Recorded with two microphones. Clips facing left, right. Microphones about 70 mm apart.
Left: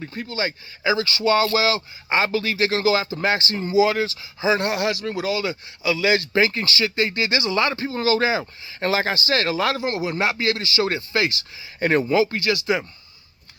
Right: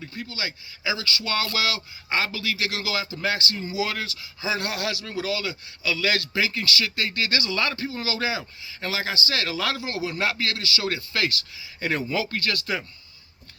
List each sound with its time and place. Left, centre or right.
0.0 s a man's voice: left
6.3 s speech: left; by 12.8 s centre